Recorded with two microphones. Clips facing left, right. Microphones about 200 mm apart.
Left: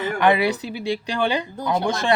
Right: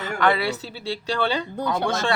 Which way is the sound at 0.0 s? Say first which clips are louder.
Left 4 dB; 15° left (ahead or behind).